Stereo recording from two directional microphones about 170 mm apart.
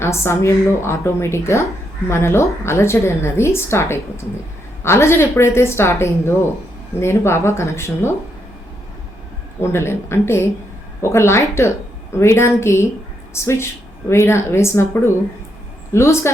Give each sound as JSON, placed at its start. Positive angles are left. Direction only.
{"t": 0.0, "sound": "a woman's voice", "side_deg": 15}
{"t": 9.6, "sound": "a woman's voice", "side_deg": 15}